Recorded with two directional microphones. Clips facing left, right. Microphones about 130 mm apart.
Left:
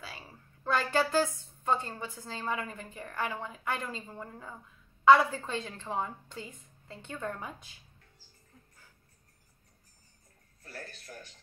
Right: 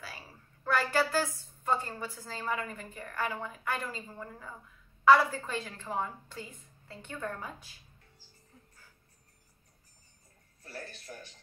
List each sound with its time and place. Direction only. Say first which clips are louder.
0.7 s a woman's voice: even; 20° left (ahead or behind)
11.1 s speech: right 1 dB; 15° right (ahead or behind)